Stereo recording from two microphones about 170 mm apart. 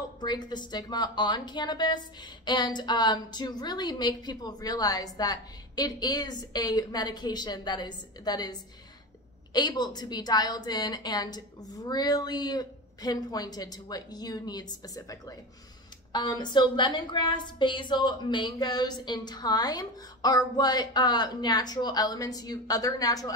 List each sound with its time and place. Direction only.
0.2 s a woman's voice: 25° left (ahead or behind)